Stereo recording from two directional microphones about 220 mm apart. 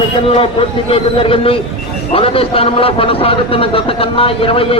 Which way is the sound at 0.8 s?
25° left (ahead or behind).